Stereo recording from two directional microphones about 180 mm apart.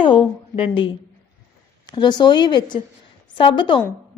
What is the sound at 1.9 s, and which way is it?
A woman's voice, 25° left (ahead or behind).